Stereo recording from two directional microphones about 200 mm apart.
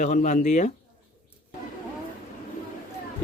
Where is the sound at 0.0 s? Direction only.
40° left (ahead or behind).